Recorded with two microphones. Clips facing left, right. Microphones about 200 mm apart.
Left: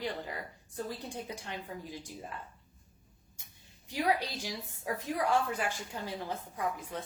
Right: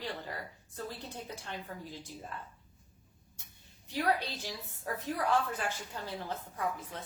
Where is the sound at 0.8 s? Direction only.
15° left (ahead or behind).